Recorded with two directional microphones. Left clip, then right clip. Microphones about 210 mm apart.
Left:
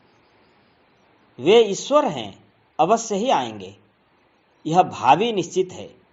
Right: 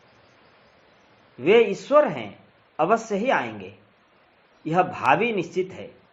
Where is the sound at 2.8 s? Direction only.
5° left (ahead or behind).